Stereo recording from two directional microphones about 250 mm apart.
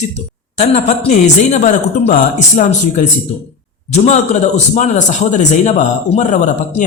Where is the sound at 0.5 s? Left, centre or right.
Left.